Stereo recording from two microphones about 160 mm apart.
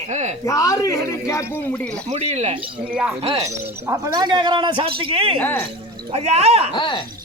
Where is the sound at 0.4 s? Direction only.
20° left (ahead or behind).